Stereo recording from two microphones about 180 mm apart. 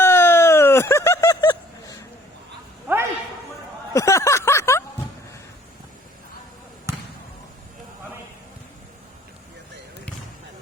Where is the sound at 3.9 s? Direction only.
15° left (ahead or behind).